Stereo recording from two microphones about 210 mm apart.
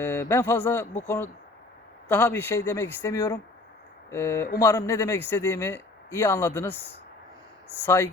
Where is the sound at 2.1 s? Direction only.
10° left (ahead or behind).